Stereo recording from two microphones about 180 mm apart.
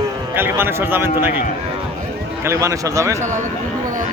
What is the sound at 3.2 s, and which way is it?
Speech, 45° right (ahead or behind).